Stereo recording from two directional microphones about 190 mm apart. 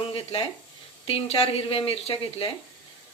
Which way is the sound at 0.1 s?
30° left (ahead or behind).